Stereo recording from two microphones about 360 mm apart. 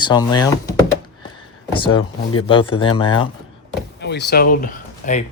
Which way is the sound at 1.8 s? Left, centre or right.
Centre.